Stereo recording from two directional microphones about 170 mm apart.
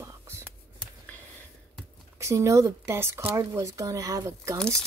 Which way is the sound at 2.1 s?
15° right (ahead or behind).